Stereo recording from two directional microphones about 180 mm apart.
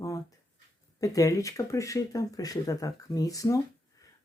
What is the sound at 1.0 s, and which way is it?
Speech, 20° left (ahead or behind).